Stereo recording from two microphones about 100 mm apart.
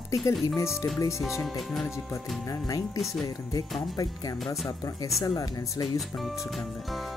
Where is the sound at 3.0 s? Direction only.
Centre (ahead or behind).